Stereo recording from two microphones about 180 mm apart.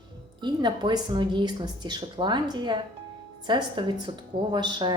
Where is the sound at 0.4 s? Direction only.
25° right (ahead or behind).